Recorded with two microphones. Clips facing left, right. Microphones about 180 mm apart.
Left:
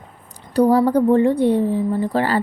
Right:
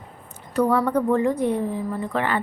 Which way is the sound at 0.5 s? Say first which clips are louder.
Left 6 dB; 35° left (ahead or behind).